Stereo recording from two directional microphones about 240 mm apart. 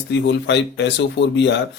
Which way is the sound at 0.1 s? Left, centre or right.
Left.